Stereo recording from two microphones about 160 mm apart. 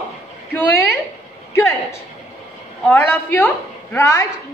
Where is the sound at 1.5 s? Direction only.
15° left (ahead or behind).